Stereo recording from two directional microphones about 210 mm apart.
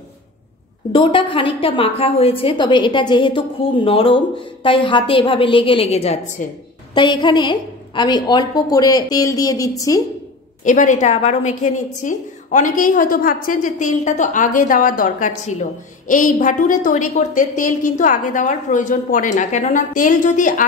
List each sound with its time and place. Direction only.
0.9 s a woman's voice: 25° left (ahead or behind)
10.6 s a woman's voice: 35° left (ahead or behind)